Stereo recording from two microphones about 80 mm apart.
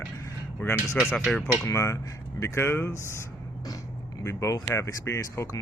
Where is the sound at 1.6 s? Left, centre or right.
Left.